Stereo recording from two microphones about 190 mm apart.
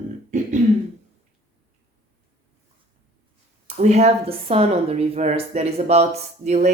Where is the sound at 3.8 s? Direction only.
35° right (ahead or behind).